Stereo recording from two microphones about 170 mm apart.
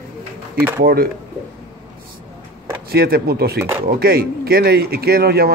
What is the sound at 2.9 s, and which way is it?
Speech, 65° right (ahead or behind).